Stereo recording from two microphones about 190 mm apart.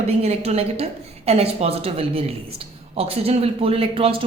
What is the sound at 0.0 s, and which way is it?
A woman's voice, 35° right (ahead or behind).